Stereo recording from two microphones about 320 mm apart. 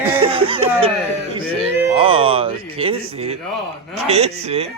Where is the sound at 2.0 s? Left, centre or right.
Centre.